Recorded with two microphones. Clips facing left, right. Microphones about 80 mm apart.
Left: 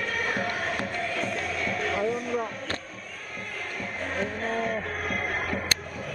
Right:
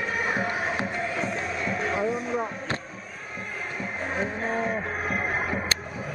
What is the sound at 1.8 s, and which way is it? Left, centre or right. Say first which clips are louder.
Speech: right 1 dB; right.